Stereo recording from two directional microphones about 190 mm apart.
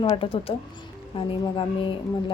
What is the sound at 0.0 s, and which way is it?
A woman's voice, 30° left (ahead or behind).